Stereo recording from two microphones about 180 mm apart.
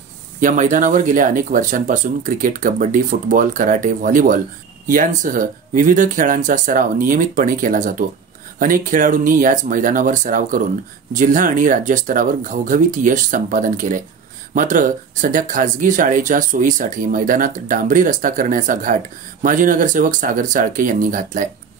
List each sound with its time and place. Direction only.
0.4 s speech: 45° right (ahead or behind)